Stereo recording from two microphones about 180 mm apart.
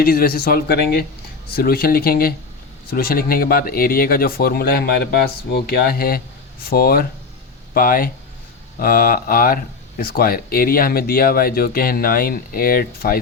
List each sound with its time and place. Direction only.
0.0 s speech: 55° left (ahead or behind)